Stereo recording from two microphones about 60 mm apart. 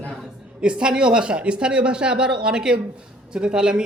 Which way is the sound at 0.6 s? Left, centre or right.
Centre.